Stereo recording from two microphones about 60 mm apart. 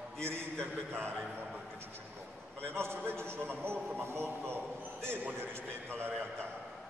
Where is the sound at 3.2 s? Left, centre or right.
Centre.